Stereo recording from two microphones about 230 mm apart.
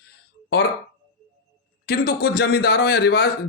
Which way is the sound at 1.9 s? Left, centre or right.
Left.